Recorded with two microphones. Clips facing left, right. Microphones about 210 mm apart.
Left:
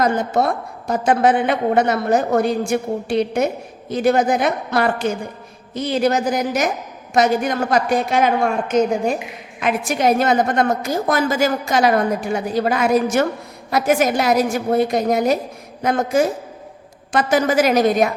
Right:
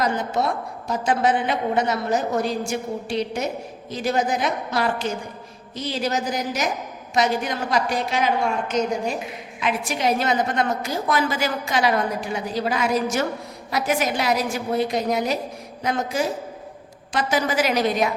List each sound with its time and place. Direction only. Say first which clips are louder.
0.0 s a woman's voice: left 5 dB; 50° left (ahead or behind)